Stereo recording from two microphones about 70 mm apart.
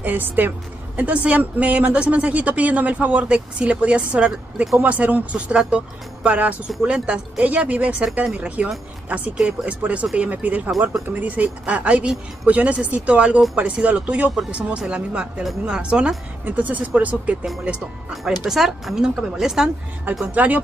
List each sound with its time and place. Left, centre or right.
0.0 s speech: right
18.4 s speech: centre
20.2 s speech: right